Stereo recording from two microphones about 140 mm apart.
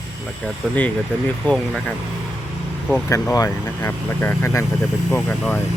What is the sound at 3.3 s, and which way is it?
Speech, 20° left (ahead or behind).